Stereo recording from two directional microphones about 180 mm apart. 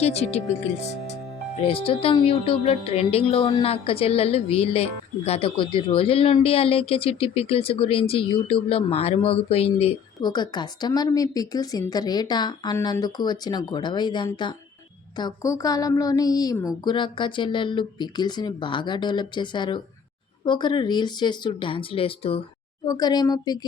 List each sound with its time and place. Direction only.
0.0 s a woman's voice: 35° left (ahead or behind)
1.6 s a woman's voice: 30° left (ahead or behind)